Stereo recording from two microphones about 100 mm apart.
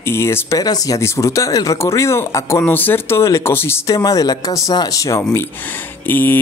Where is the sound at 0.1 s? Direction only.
25° left (ahead or behind).